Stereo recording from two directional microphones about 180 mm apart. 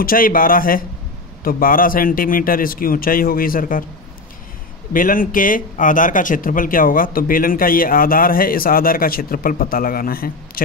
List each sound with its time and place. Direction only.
0.0 s speech: 55° left (ahead or behind)
4.9 s speech: 50° left (ahead or behind)